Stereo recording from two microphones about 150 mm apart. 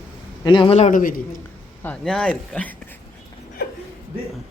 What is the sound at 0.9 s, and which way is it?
Speech, 65° left (ahead or behind).